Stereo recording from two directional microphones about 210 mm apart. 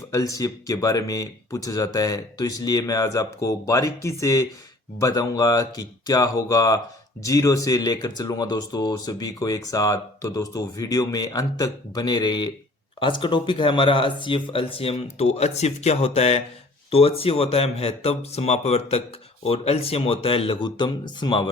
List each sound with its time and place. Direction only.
0.1 s speech: 15° left (ahead or behind)